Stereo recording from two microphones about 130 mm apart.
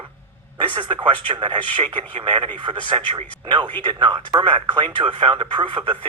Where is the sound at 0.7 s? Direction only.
40° right (ahead or behind).